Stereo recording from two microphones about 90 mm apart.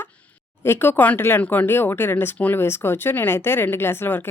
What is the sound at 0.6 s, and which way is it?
Speech, 25° left (ahead or behind).